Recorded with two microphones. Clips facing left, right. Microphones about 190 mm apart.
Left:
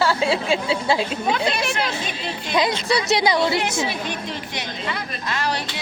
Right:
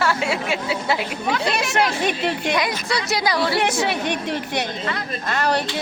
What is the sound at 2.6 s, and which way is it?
A woman's voice, 25° left (ahead or behind).